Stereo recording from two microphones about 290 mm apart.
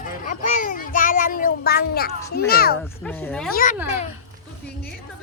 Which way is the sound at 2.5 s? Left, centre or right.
Left.